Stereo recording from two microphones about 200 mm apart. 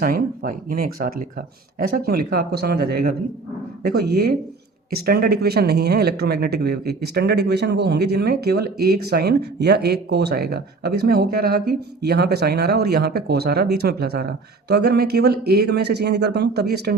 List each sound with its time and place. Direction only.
0.0 s speech: 45° right (ahead or behind)